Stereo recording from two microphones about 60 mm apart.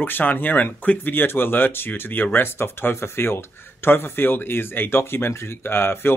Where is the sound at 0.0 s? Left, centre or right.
Left.